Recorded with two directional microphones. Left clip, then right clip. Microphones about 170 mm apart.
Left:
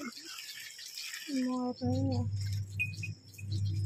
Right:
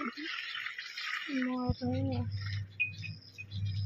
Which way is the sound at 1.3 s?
15° left (ahead or behind).